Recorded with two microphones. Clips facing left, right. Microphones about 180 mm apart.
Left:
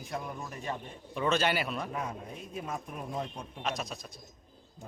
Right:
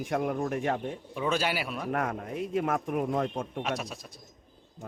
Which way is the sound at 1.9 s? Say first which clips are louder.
Right 7 dB; 75° right (ahead or behind).